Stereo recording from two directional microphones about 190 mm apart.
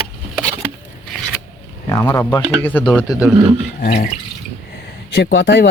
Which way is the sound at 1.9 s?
15° left (ahead or behind).